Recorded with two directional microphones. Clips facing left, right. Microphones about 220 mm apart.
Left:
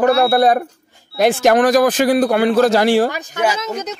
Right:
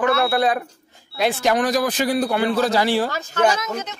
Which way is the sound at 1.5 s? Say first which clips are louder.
Left 7 dB; 60° left (ahead or behind).